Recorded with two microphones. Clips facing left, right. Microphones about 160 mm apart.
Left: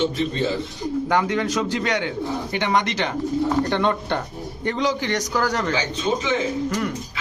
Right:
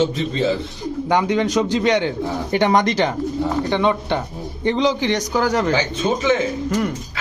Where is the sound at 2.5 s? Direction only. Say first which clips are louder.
Right 7 dB; 40° right (ahead or behind).